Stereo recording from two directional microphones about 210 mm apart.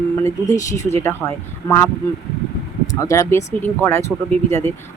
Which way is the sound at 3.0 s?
15° left (ahead or behind).